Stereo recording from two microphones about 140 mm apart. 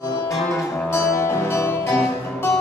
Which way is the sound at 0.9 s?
20° left (ahead or behind).